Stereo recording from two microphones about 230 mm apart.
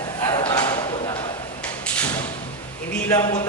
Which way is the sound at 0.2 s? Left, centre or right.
Centre.